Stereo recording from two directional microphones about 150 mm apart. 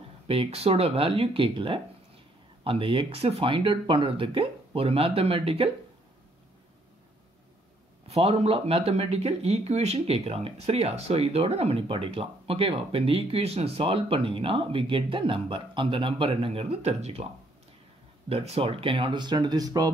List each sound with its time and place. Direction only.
0.3 s speech: 40° right (ahead or behind)
8.1 s speech: 45° right (ahead or behind)
18.3 s speech: 40° right (ahead or behind); by 19.9 s 25° right (ahead or behind)